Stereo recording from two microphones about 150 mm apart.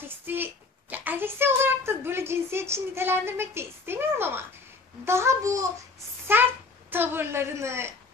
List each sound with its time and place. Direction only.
0.3 s a child's voice: 15° right (ahead or behind)